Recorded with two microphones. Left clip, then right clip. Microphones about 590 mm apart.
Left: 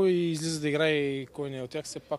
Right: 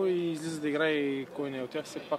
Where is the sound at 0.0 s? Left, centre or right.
Left.